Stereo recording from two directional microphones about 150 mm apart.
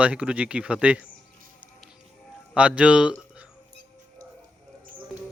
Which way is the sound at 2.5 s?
5° right (ahead or behind).